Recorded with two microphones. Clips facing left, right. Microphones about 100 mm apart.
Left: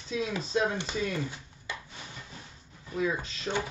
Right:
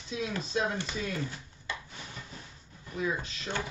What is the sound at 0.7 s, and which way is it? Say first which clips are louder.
Speech: left 3 dB; 25° left (ahead or behind).